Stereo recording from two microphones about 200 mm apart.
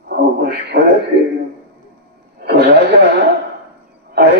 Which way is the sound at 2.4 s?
55° right (ahead or behind).